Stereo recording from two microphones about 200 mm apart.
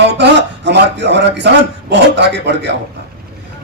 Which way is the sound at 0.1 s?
60° right (ahead or behind).